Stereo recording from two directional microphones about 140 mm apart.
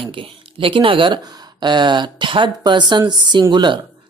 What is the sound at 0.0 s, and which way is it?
Speech, 40° right (ahead or behind).